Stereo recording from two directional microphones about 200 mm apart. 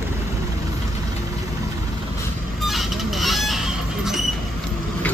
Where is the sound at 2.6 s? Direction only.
Centre (ahead or behind).